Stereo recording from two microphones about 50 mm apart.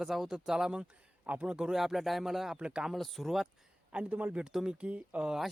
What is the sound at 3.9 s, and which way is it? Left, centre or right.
Speech, right.